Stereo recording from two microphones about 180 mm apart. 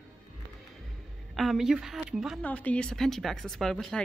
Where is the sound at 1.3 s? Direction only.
Centre (ahead or behind).